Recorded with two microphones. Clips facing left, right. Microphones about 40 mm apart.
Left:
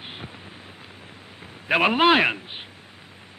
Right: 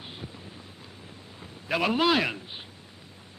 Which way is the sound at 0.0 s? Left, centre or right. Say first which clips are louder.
Left 3 dB; left.